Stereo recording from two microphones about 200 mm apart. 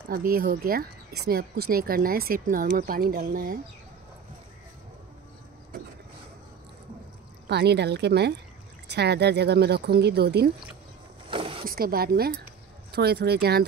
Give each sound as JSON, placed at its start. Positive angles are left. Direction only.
{"t": 0.1, "sound": "speech", "side_deg": -45}
{"t": 7.4, "sound": "speech", "side_deg": -55}
{"t": 11.2, "sound": "a sound", "side_deg": -25}
{"t": 11.6, "sound": "speech", "side_deg": -45}